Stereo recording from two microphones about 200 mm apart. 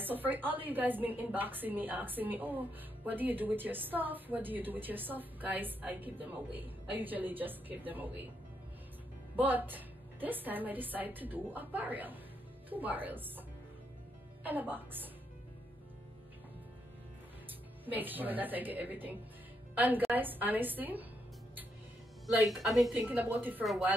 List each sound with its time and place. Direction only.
0.0 s a woman's voice: 10° right (ahead or behind)
9.4 s a woman's voice: 10° right (ahead or behind)
14.4 s a woman's voice: 10° right (ahead or behind)
17.9 s a woman's voice: 10° right (ahead or behind)
22.2 s a woman's voice: centre (ahead or behind)